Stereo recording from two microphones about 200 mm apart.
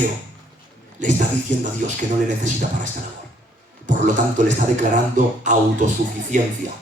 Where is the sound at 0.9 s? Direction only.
40° right (ahead or behind).